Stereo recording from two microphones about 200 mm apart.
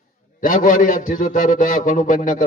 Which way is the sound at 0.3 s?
40° left (ahead or behind).